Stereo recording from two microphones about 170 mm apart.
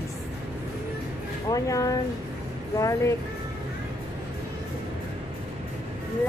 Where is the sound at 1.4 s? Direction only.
20° left (ahead or behind).